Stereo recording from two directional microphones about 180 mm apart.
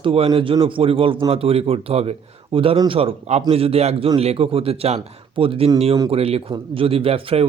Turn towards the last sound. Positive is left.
turn(degrees=-30)  # may be behind; listen again after turning